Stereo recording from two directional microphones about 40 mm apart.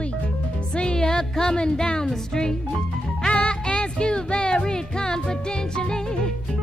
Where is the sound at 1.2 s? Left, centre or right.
Centre.